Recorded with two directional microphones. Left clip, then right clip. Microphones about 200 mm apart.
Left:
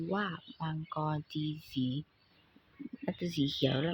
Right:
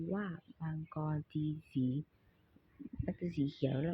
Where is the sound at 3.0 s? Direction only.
15° left (ahead or behind).